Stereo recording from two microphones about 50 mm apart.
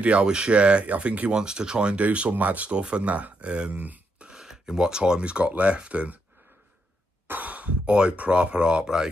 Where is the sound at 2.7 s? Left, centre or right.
Right.